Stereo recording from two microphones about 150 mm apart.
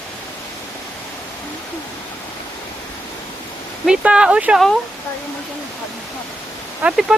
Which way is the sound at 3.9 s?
5° right (ahead or behind).